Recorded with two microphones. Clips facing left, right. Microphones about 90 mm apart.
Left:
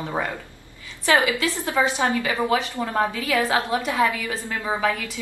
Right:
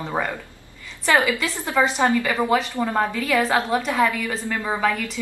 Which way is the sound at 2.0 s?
10° left (ahead or behind).